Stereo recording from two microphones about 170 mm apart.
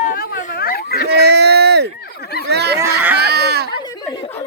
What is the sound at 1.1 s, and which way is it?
Speech, 70° right (ahead or behind).